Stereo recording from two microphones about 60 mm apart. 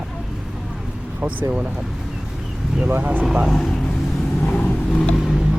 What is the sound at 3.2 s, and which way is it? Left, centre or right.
Speech, centre.